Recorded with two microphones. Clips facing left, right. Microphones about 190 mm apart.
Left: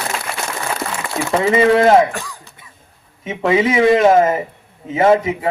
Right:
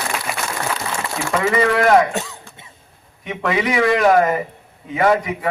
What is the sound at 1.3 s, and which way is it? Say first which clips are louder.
Speech: left 5 dB; 25° left (ahead or behind).